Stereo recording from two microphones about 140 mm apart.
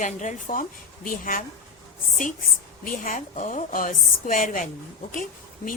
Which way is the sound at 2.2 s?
80° left.